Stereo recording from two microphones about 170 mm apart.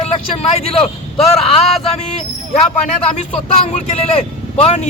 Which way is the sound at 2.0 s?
40° left (ahead or behind).